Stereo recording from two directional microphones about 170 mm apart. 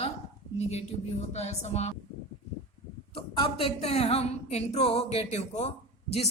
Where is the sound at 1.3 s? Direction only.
40° left (ahead or behind).